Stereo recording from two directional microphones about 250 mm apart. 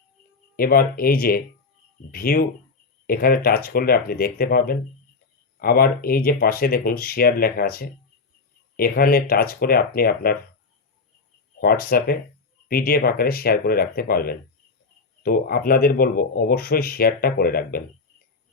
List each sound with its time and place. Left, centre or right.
0.5 s speech: left
11.6 s speech: left